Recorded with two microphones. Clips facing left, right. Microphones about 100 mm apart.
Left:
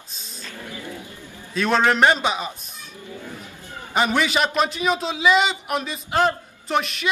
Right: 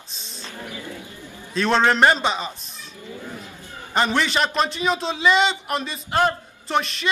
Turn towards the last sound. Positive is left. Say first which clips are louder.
# even
turn(degrees=5)  # may be behind; listen again after turning